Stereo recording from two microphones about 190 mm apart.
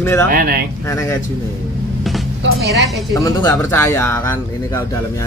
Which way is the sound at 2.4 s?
65° right (ahead or behind).